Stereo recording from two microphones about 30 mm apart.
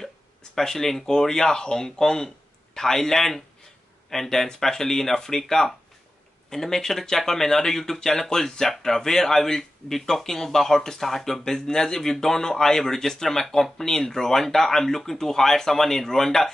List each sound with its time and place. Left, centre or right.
0.6 s speech: centre
6.5 s speech: centre